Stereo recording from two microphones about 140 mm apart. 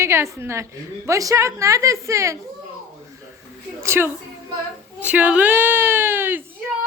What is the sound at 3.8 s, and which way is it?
A woman's voice, 20° right (ahead or behind).